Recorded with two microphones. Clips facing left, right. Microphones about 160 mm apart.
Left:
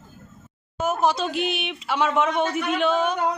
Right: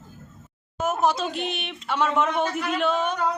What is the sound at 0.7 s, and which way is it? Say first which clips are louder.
Speech: left 1 dB; centre (ahead or behind).